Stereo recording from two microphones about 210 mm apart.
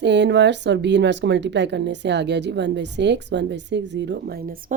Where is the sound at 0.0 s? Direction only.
55° right (ahead or behind).